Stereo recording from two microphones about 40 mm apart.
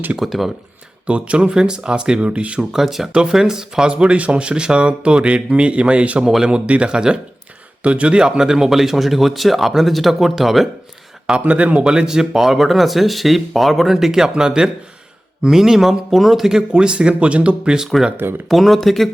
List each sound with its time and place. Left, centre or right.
0.2 s speech: centre
1.0 s speech: right
2.8 s speech: centre
3.1 s speech: centre
6.2 s speech: centre
6.5 s speech: right; by 10.7 s centre
11.3 s speech: right; by 16.6 s centre
16.6 s speech: right
18.2 s speech: right
18.4 s speech: centre